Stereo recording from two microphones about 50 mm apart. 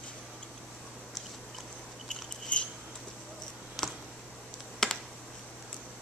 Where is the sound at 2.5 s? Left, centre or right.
Left.